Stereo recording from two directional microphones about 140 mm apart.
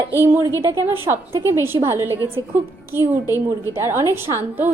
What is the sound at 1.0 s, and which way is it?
A woman's voice, 20° right (ahead or behind).